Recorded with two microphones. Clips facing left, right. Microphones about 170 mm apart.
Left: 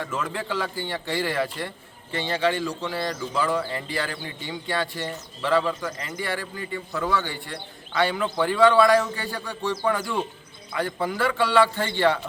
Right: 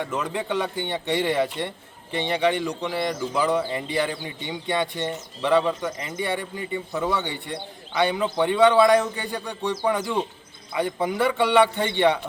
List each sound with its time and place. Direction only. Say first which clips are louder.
0.0 s a man's voice: right 2 dB; 20° right (ahead or behind)